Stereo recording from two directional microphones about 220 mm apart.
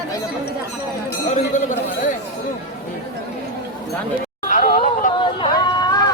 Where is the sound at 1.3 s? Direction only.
35° left (ahead or behind).